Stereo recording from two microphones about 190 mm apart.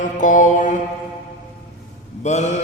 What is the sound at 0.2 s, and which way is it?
Mantra, 45° left (ahead or behind).